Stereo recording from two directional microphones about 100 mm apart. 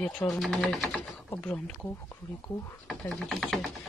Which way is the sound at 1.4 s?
10° left (ahead or behind).